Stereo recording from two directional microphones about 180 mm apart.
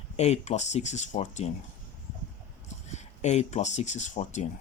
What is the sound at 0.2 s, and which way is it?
Speech, 40° left (ahead or behind).